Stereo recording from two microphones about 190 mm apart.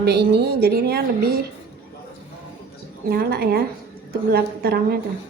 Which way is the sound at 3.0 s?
55° right (ahead or behind).